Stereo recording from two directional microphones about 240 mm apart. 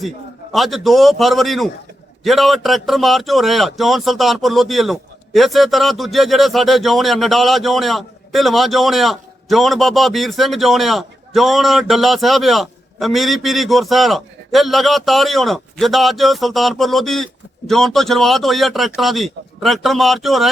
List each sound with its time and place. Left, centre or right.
0.5 s a man's voice: centre